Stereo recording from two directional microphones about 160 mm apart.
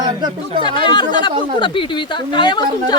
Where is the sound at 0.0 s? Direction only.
25° right (ahead or behind).